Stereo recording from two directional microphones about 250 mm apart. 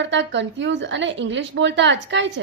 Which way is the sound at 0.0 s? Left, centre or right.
Right.